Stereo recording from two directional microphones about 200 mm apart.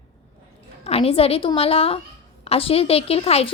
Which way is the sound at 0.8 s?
30° left (ahead or behind).